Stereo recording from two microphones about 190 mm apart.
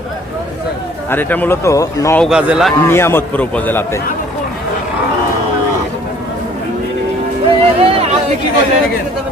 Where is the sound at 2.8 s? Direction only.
10° left (ahead or behind).